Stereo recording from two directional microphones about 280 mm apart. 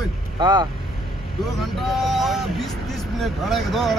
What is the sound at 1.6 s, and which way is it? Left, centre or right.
Speech, centre.